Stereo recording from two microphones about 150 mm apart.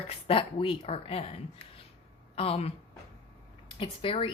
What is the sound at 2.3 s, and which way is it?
Speech, 40° left (ahead or behind).